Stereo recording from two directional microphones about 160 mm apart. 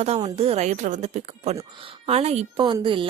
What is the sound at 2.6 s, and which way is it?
Speech, 30° right (ahead or behind).